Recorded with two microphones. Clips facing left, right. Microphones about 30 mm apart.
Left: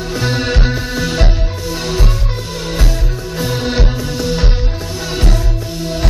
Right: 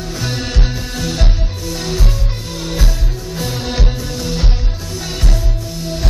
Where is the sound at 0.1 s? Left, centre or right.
Left.